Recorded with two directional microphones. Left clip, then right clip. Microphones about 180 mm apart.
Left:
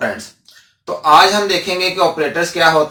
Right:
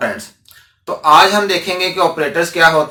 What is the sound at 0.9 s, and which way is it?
Speech, 10° right (ahead or behind).